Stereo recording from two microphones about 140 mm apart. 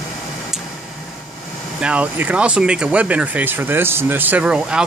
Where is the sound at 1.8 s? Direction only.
10° right (ahead or behind).